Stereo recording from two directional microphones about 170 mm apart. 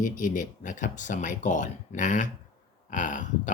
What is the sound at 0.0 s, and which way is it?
Speech, 50° left (ahead or behind).